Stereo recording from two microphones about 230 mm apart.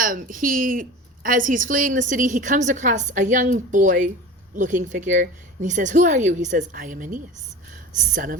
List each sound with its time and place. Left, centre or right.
0.0 s a woman's voice: right